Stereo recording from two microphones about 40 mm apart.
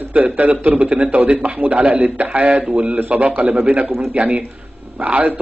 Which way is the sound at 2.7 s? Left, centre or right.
Right.